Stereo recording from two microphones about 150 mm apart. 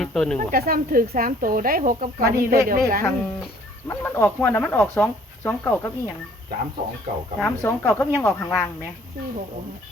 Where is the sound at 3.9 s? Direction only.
15° left (ahead or behind).